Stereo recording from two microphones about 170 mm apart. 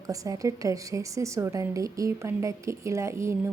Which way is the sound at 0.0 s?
20° right (ahead or behind).